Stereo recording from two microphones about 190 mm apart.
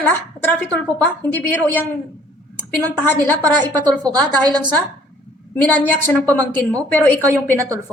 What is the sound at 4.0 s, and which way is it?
Speech, 20° right (ahead or behind).